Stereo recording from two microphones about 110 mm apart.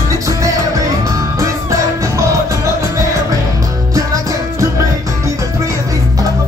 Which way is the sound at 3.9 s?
30° right (ahead or behind).